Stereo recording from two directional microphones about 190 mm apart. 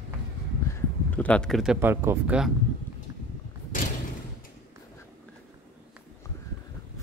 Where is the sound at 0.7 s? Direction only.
10° left (ahead or behind).